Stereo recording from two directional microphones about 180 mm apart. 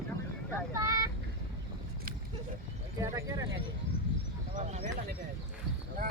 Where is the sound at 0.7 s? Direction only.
15° right (ahead or behind).